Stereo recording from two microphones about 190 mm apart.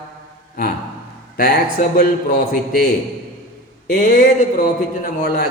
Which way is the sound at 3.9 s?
50° left (ahead or behind).